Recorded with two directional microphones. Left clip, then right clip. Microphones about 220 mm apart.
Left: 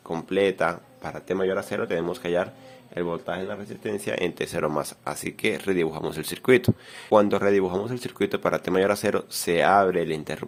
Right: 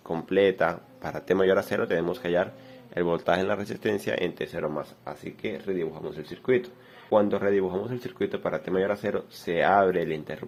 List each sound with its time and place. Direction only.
0.1 s speech: 5° left (ahead or behind)
3.2 s speech: 10° right (ahead or behind)
4.0 s speech: 10° left (ahead or behind); by 6.7 s 30° left (ahead or behind)
7.1 s speech: 20° left (ahead or behind)